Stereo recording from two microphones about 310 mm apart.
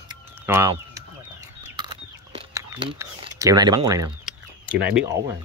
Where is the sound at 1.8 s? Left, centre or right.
Centre.